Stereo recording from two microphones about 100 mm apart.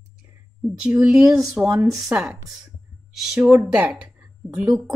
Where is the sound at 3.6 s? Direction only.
15° right (ahead or behind).